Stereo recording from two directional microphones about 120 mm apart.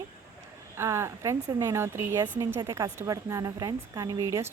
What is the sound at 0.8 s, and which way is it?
A woman's voice, 20° right (ahead or behind).